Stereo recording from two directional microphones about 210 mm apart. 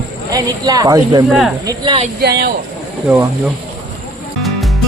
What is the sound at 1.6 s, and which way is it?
Speech, 20° right (ahead or behind).